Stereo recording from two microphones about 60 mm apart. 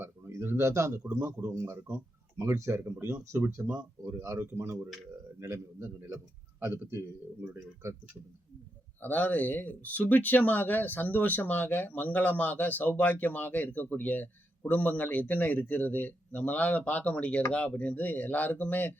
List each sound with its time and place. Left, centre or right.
0.4 s speech: right
2.4 s speech: right
7.5 s speech: right
9.0 s speech: left